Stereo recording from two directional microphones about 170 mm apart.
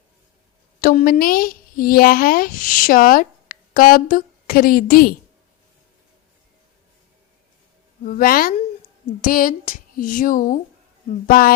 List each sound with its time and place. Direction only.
0.8 s speech: 55° left (ahead or behind)
8.0 s speech: 55° left (ahead or behind)